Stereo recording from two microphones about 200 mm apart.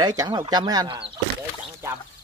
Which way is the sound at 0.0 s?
20° right (ahead or behind).